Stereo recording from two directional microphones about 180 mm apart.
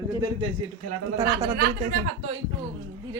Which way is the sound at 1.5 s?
55° right (ahead or behind).